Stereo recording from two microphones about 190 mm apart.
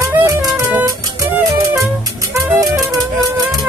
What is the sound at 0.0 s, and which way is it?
Music, 15° right (ahead or behind).